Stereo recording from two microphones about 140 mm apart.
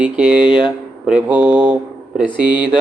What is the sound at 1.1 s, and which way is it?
Speech, 10° right (ahead or behind).